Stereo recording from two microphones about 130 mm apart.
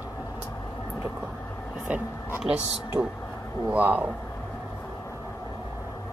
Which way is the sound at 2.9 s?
10° right (ahead or behind).